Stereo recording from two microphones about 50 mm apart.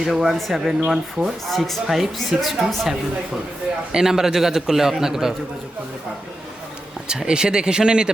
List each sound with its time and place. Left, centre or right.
0.0 s speech: centre
3.9 s a man's voice: centre
7.1 s a man's voice: centre